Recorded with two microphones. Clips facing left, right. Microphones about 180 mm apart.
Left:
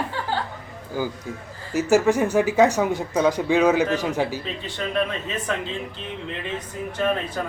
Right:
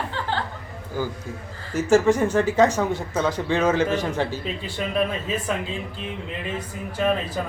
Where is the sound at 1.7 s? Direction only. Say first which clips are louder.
Even; 10° left (ahead or behind).